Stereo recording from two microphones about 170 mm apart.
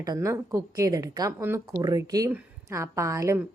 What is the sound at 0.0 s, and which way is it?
A woman's voice, 20° right (ahead or behind).